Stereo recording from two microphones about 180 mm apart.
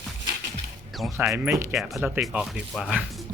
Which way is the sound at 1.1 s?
15° right (ahead or behind).